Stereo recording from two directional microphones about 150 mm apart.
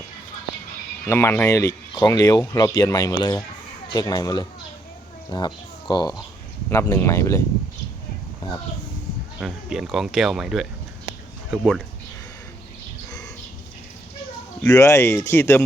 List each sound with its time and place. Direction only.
1.0 s speech: 15° left (ahead or behind)
6.7 s a child's voice: 20° left (ahead or behind)
9.4 s speech: 5° right (ahead or behind)
14.7 s speech: 20° left (ahead or behind)